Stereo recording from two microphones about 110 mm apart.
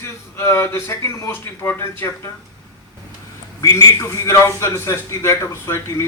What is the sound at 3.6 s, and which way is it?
A man's voice, 25° left (ahead or behind).